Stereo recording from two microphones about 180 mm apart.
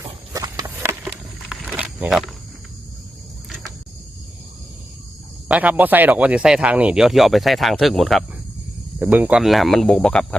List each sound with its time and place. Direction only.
0.0 s a sound: 20° right (ahead or behind)
1.0 s wild animals: centre (ahead or behind)
5.5 s speech: 10° right (ahead or behind)